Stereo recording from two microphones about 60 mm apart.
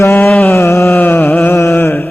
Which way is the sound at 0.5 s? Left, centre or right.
Left.